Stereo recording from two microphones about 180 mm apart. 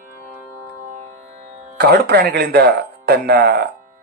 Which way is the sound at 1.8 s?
65° right (ahead or behind).